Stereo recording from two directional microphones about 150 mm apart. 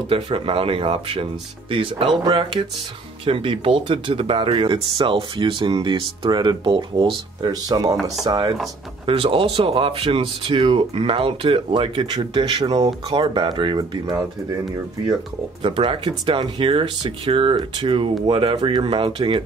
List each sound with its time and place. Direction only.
0.1 s speech: 40° right (ahead or behind)
15.6 s speech: 35° right (ahead or behind)